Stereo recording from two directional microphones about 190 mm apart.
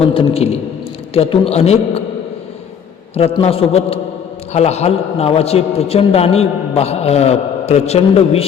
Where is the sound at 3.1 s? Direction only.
30° left (ahead or behind).